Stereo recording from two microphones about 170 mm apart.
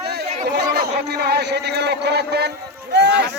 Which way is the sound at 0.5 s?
75° right (ahead or behind).